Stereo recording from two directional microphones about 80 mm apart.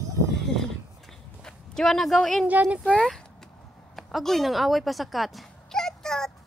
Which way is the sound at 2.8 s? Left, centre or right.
Centre.